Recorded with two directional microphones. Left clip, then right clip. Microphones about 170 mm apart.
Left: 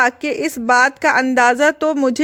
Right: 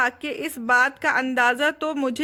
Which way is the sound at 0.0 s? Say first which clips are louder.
Left 7 dB; 45° left (ahead or behind).